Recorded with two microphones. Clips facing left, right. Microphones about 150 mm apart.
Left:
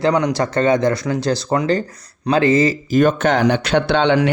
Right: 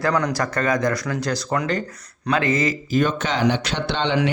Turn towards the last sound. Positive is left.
turn(degrees=60)  # may be behind; listen again after turning